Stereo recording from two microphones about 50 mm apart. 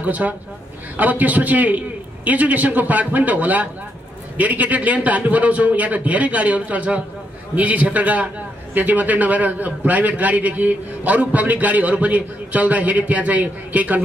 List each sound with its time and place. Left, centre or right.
0.0 s a man's voice: right